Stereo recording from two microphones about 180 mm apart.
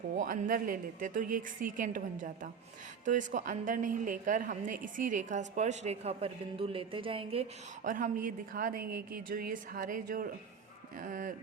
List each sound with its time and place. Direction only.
0.2 s a woman's voice: 45° right (ahead or behind)
3.0 s a woman's voice: 45° right (ahead or behind)
7.9 s a woman's voice: 45° right (ahead or behind)